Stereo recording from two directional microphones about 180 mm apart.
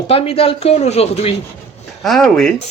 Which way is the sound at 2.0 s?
Centre (ahead or behind).